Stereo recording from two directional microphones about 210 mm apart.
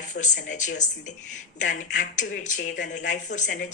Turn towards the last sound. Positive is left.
turn(degrees=35)  # may be behind; listen again after turning